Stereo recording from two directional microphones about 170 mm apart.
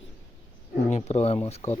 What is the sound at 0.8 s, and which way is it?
Speech, 40° left (ahead or behind).